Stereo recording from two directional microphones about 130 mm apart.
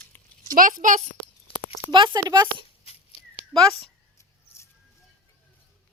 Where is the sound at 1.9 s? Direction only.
35° right (ahead or behind).